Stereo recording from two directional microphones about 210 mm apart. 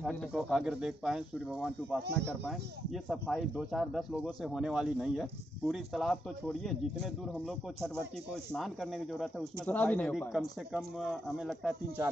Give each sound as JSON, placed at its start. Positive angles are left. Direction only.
{"t": 0.0, "sound": "speech", "side_deg": 0}
{"t": 8.5, "sound": "speech", "side_deg": 0}